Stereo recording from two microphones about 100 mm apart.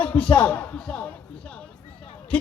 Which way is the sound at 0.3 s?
20° left (ahead or behind).